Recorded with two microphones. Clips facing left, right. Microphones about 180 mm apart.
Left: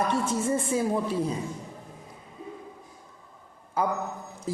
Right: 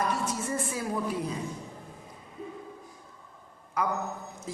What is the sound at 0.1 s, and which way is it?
A woman's voice, 25° left (ahead or behind).